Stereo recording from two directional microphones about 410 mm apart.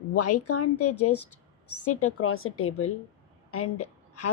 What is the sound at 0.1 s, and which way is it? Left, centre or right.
A woman's voice, left.